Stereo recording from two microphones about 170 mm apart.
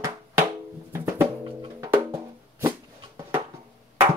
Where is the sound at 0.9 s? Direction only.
20° right (ahead or behind).